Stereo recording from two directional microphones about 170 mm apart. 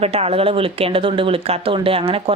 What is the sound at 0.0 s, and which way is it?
A woman's voice, 35° right (ahead or behind).